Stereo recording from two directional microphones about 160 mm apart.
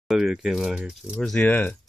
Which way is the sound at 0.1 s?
5° right (ahead or behind).